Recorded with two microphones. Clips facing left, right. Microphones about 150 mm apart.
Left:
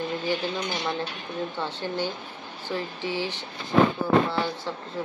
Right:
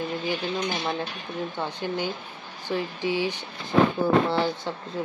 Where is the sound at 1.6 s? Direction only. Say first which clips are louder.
Right 1 dB; 15° right (ahead or behind).